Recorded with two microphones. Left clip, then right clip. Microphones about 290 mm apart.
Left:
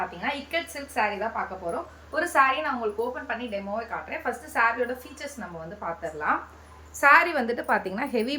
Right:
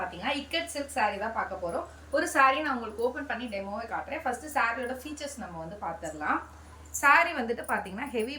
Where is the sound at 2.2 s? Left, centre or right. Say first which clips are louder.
Left 3 dB; centre.